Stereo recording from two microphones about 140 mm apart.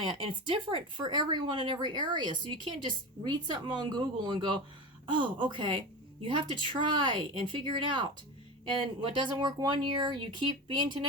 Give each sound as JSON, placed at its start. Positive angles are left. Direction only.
{"t": 0.0, "sound": "speech", "side_deg": -35}